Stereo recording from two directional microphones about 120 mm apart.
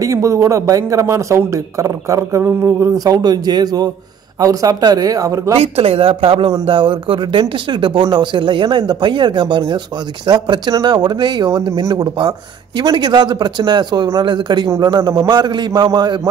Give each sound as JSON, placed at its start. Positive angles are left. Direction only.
{"t": 0.0, "sound": "a man's voice", "side_deg": -25}
{"t": 5.6, "sound": "speech", "side_deg": -55}